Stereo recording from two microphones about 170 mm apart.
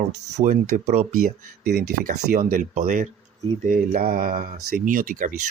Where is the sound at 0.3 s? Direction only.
45° right (ahead or behind).